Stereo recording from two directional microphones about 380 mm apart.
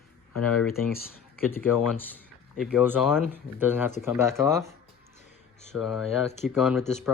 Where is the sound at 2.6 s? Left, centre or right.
Centre.